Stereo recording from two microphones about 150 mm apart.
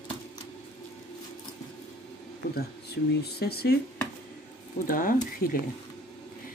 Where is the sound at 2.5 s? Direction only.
90° left.